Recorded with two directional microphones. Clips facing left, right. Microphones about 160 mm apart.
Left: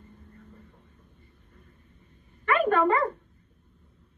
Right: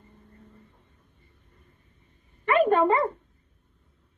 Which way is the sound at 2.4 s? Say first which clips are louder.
Right 2 dB; 25° right (ahead or behind).